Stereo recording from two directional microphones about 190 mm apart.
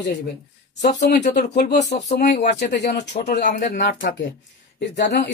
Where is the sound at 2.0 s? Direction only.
35° left (ahead or behind).